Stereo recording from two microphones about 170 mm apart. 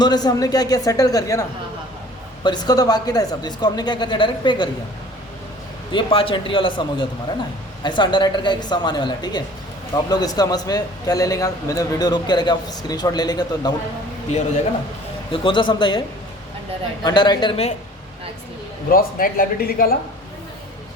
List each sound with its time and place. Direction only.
0.0 s a man's voice: 25° left (ahead or behind)
5.9 s a man's voice: 30° left (ahead or behind)
15.3 s a man's voice: 30° left (ahead or behind)
18.9 s speech: 55° left (ahead or behind)